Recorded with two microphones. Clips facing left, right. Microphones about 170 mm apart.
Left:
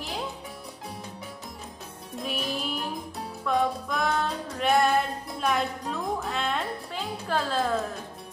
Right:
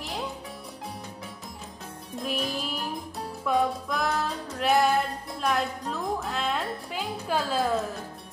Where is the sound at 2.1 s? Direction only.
Centre (ahead or behind).